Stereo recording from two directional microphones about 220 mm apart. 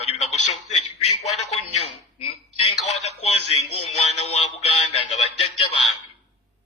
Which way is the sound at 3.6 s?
90° left.